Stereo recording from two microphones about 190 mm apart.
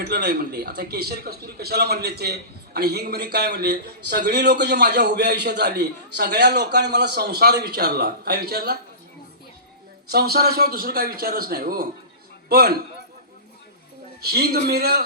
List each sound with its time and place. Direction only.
0.0 s a man's voice: 60° right (ahead or behind)
10.1 s a man's voice: 55° right (ahead or behind)
14.2 s a man's voice: 55° right (ahead or behind)